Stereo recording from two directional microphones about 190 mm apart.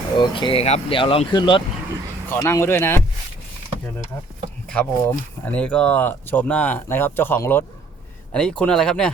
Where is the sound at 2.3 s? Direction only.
15° left (ahead or behind).